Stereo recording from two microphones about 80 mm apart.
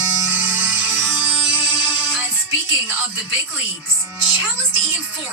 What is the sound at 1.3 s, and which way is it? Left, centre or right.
Music, centre.